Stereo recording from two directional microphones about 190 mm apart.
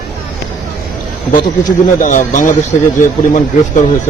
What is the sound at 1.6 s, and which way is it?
Speech, 40° left (ahead or behind).